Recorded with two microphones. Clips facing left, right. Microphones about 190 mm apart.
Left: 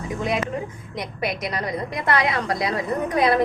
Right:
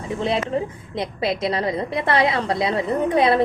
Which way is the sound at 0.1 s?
30° right (ahead or behind).